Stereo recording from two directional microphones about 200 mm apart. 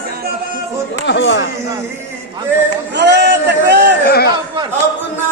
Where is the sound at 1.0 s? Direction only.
65° left (ahead or behind).